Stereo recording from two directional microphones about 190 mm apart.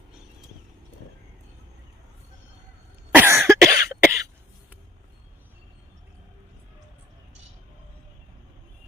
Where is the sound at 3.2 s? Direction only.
15° right (ahead or behind).